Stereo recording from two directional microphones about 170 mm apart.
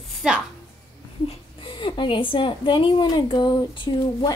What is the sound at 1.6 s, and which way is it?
A woman's voice, 30° left (ahead or behind).